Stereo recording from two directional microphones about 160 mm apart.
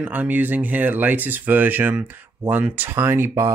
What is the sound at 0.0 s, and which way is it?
Speech, 10° right (ahead or behind).